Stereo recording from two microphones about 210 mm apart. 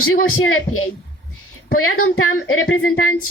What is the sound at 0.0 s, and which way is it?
A woman's voice, 80° left.